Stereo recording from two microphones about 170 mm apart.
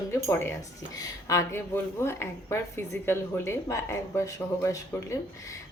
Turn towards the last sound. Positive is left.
turn(degrees=15)  # may be behind; listen again after turning